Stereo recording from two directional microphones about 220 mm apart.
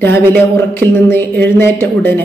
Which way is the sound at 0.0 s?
10° left (ahead or behind).